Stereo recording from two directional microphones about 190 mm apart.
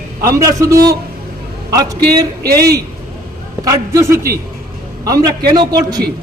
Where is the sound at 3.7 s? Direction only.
15° right (ahead or behind).